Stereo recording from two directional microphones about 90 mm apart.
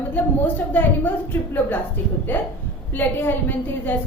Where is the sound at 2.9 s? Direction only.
20° left (ahead or behind).